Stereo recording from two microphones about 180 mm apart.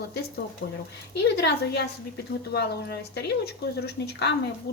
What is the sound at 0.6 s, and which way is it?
Speech, 80° left.